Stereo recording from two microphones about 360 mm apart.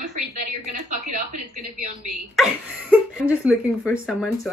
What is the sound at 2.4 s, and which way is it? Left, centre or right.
Speech, centre.